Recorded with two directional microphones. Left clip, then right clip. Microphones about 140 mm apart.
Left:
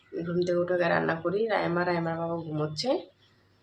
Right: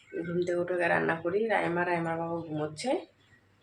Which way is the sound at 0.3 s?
15° left (ahead or behind).